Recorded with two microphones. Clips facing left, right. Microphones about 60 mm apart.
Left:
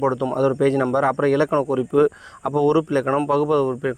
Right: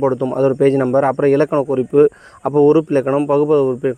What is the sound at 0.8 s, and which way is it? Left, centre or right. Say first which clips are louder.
Speech: right 5 dB; right.